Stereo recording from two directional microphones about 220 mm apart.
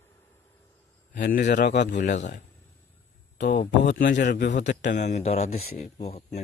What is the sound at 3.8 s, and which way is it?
Speech, 50° left (ahead or behind).